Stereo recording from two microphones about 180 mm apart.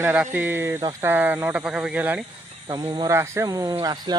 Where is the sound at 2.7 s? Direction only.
25° right (ahead or behind).